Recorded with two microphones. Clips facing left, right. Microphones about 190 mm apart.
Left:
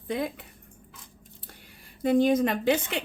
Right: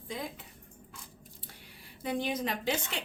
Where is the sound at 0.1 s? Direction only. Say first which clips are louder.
Left 9 dB; 65° left (ahead or behind).